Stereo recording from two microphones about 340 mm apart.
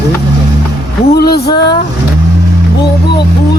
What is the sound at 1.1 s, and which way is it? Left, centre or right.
Speech, left.